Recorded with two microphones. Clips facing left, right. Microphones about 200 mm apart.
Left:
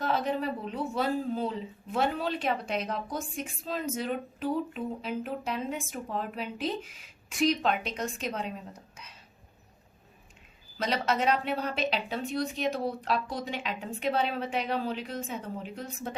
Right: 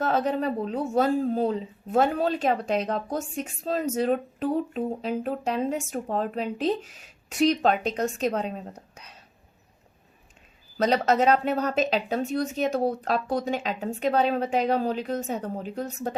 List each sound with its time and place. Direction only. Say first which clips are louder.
0.1 s speech: right 4 dB; 40° right (ahead or behind)
10.8 s speech: right 7 dB; 40° right (ahead or behind)